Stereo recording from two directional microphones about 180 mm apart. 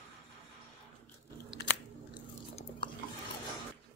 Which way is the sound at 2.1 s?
25° left (ahead or behind).